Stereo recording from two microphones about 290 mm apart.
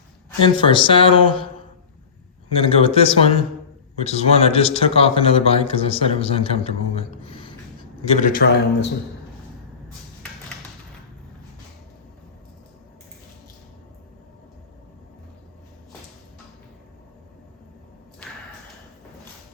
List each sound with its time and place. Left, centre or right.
0.4 s speech: centre
2.5 s speech: centre